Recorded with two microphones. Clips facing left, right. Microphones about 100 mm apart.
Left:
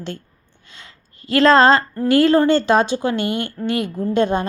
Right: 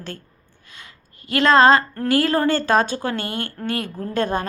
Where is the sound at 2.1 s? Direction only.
25° left (ahead or behind).